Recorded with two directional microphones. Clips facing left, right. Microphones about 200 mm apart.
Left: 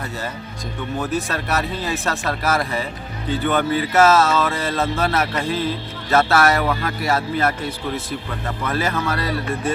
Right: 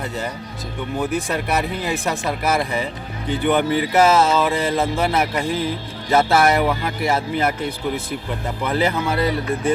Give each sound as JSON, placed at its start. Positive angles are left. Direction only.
{"t": 0.9, "sound": "speech", "side_deg": -15}